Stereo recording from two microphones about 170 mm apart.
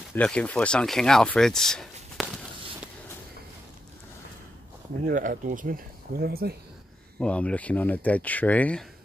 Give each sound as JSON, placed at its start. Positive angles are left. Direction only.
{"t": 0.1, "sound": "speech", "side_deg": 5}
{"t": 5.0, "sound": "speech", "side_deg": -55}
{"t": 7.2, "sound": "speech", "side_deg": 5}